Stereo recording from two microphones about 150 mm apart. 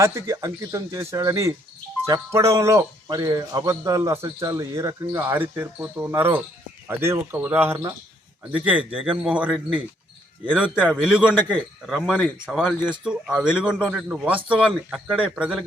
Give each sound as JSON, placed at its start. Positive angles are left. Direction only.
{"t": 0.0, "sound": "a man's voice", "side_deg": -20}
{"t": 10.8, "sound": "a man's voice", "side_deg": 5}
{"t": 11.0, "sound": "speech", "side_deg": -5}
{"t": 11.3, "sound": "a man's voice", "side_deg": 10}
{"t": 11.9, "sound": "a man's voice", "side_deg": 0}